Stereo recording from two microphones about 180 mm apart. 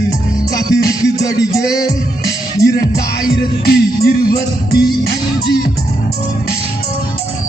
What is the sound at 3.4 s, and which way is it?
Music, 60° left (ahead or behind).